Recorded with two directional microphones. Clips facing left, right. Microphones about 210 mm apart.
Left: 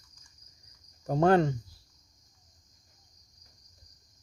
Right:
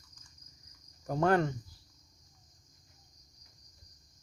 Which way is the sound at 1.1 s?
30° left (ahead or behind).